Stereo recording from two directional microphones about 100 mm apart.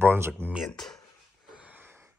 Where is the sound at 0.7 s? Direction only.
5° left (ahead or behind).